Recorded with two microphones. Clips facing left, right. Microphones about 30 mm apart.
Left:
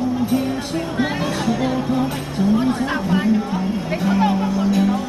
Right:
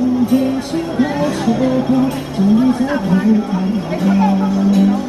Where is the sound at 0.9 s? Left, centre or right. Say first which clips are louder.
Right 6 dB; left.